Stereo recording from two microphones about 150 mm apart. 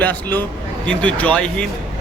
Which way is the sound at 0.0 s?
10° left (ahead or behind).